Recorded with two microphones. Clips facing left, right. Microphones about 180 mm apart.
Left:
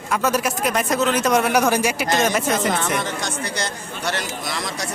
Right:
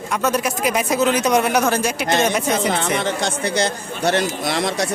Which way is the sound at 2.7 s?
60° right (ahead or behind).